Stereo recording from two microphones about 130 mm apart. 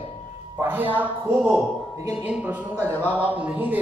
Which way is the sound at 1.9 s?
25° right (ahead or behind).